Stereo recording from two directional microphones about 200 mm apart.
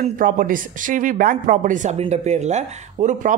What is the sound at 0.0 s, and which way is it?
Speech, 45° right (ahead or behind).